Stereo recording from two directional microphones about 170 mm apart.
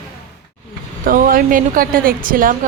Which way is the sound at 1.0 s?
55° right (ahead or behind).